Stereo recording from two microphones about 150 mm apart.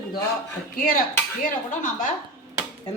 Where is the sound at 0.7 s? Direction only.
65° left (ahead or behind).